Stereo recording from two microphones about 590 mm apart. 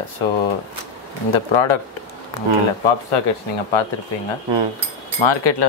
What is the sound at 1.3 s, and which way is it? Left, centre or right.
Speech, left.